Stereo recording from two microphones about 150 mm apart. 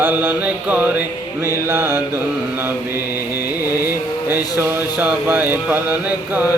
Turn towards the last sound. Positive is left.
turn(degrees=-10)  # may be behind; listen again after turning